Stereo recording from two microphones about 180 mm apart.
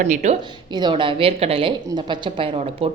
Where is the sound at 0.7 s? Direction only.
25° right (ahead or behind).